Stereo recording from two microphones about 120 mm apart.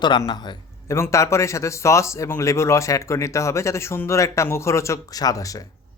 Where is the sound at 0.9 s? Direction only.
25° left (ahead or behind).